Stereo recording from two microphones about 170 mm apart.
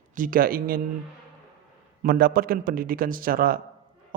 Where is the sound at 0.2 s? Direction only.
55° right (ahead or behind).